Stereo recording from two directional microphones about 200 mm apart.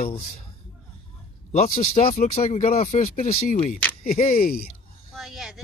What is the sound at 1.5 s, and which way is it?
Speech, 30° left (ahead or behind).